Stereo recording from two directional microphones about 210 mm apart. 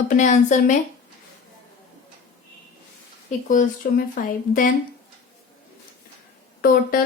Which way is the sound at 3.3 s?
35° left (ahead or behind).